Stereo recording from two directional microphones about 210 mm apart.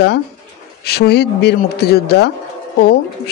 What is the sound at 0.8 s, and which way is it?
A man's voice, 50° left (ahead or behind).